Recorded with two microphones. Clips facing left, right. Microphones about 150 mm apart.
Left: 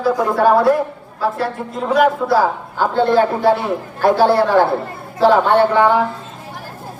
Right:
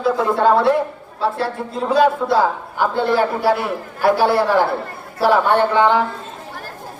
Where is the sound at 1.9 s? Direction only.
30° right (ahead or behind).